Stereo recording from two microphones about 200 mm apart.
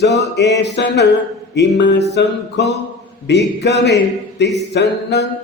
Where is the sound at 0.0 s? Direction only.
55° left (ahead or behind).